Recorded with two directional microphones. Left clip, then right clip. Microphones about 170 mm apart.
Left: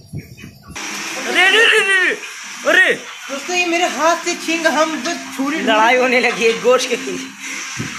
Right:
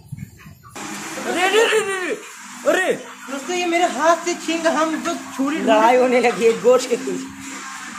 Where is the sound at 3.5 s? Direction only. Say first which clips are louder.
Left 2 dB; 35° left (ahead or behind).